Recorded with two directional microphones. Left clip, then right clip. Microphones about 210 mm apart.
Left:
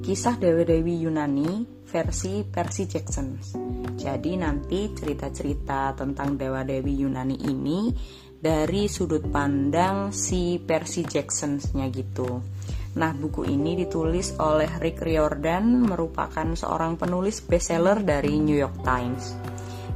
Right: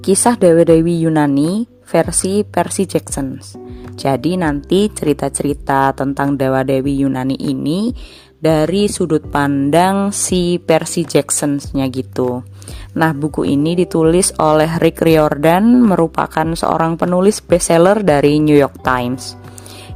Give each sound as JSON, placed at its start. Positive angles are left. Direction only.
{"t": 0.0, "sound": "speech", "side_deg": -50}
{"t": 7.5, "sound": "music", "side_deg": -40}
{"t": 9.7, "sound": "speech", "side_deg": -45}